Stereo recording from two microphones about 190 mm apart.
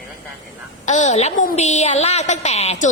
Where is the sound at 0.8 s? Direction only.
40° left (ahead or behind).